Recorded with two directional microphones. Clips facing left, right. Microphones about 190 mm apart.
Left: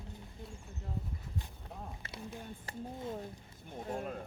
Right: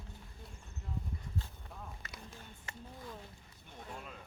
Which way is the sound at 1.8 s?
30° left (ahead or behind).